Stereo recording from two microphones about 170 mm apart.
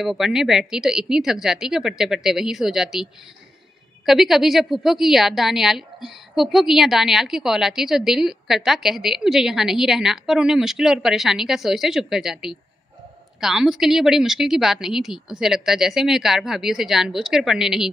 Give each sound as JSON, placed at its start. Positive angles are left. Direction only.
{"t": 0.0, "sound": "a woman's voice", "side_deg": 0}